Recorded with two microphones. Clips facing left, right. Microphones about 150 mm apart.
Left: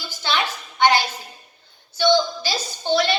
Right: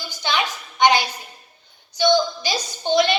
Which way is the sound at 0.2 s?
15° right (ahead or behind).